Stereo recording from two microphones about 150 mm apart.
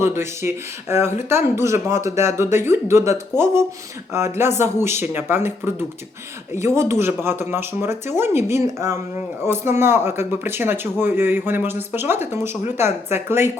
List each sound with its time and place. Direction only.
0.0 s speech: 15° right (ahead or behind)